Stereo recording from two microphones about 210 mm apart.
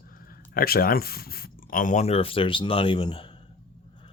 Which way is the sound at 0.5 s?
45° left (ahead or behind).